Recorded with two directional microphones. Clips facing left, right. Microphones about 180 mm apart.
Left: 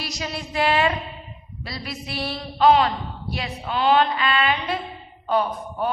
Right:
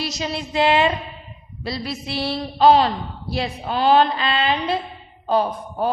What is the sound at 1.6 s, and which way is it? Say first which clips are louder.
A man's voice: right 6 dB; 30° right (ahead or behind).